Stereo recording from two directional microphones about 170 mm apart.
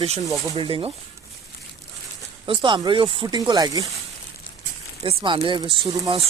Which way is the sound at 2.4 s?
25° right (ahead or behind).